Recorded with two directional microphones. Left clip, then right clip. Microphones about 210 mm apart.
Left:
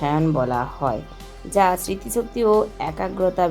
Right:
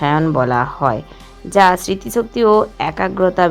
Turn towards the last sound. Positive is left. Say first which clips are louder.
# right 6 dB
turn(degrees=-25)  # may be behind; listen again after turning